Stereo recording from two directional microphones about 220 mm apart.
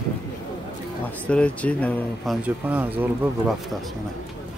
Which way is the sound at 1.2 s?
5° left (ahead or behind).